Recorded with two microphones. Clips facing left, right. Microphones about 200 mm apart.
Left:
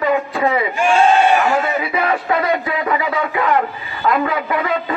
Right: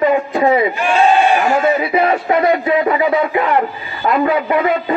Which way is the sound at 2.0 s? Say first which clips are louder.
Right 4 dB; 25° right (ahead or behind).